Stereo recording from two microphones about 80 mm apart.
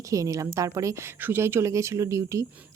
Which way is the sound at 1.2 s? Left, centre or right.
Right.